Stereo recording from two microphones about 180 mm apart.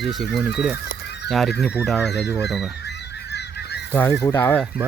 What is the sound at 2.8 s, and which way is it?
Goose, 70° left (ahead or behind).